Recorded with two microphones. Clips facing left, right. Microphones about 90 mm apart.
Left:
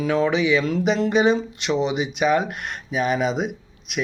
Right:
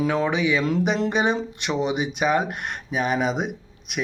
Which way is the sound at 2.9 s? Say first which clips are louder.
Left 2 dB; 50° right (ahead or behind).